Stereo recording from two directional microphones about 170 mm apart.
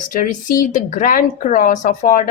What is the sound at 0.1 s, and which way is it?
A woman's voice, 50° left (ahead or behind).